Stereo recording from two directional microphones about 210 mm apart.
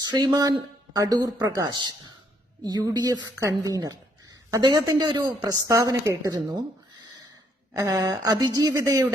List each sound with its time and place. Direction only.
0.0 s speech: 20° right (ahead or behind)
7.8 s a woman's voice: 20° right (ahead or behind)